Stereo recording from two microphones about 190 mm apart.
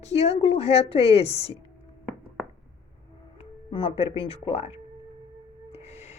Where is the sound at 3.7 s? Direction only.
25° left (ahead or behind).